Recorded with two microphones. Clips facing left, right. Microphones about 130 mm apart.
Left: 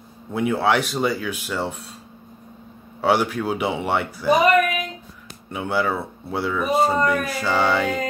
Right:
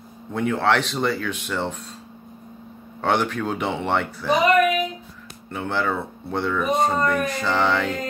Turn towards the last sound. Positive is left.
turn(degrees=10)  # may be behind; listen again after turning